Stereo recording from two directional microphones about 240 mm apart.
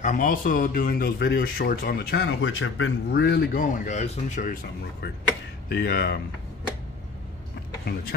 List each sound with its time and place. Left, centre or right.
0.0 s speech: left
5.0 s speech: left